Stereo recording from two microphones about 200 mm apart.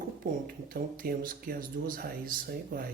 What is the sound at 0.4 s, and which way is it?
Speech, 45° right (ahead or behind).